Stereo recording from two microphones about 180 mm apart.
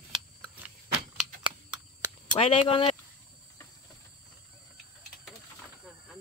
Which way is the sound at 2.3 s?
30° left (ahead or behind).